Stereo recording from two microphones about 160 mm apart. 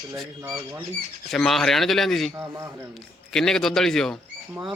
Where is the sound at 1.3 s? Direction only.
5° left (ahead or behind).